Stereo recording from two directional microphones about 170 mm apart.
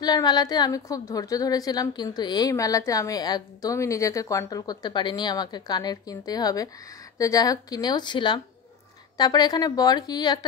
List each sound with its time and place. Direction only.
0.0 s a woman's voice: 25° left (ahead or behind)